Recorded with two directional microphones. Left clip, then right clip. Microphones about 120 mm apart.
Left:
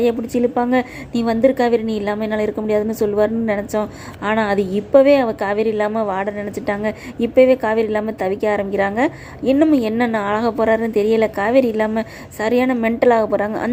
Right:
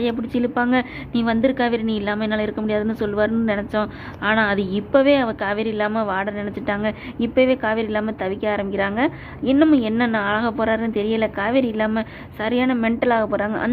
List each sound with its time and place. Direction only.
0.0 s a woman's voice: 30° left (ahead or behind)